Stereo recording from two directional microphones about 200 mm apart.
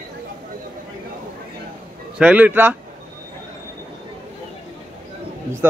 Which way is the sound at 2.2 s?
5° right (ahead or behind).